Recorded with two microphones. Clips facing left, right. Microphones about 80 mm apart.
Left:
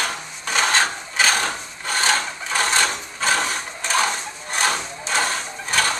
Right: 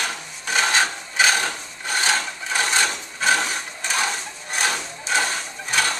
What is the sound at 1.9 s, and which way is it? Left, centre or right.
Wood, centre.